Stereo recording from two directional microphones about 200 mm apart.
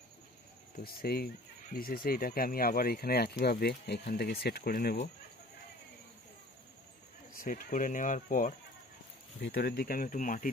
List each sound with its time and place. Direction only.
1.0 s speech: 50° left (ahead or behind)
7.3 s speech: 45° left (ahead or behind)